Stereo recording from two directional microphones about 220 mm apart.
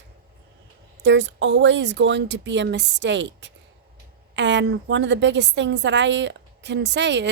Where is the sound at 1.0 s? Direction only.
55° right (ahead or behind).